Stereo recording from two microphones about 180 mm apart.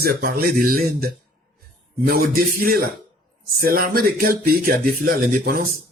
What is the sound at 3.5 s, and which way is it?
Speech, 55° right (ahead or behind).